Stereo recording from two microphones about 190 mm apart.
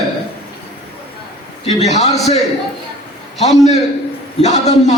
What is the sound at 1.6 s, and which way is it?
Speech, 35° left (ahead or behind).